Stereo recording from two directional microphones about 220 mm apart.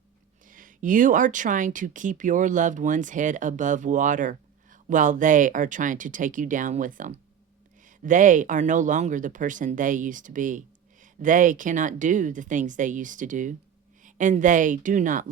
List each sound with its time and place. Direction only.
0.4 s speech: 35° right (ahead or behind)